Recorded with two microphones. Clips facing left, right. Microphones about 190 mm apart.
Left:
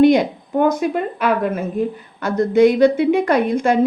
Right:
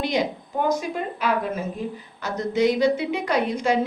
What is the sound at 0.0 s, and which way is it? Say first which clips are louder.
A woman's voice: left 12 dB; 55° left (ahead or behind).